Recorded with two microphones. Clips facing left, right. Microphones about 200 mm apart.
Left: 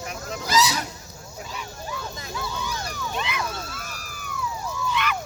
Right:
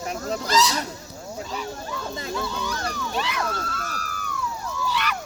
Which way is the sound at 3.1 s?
40° right (ahead or behind).